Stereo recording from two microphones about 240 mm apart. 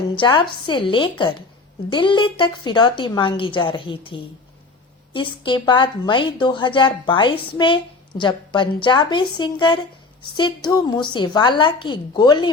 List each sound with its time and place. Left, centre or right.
0.2 s a woman's voice: centre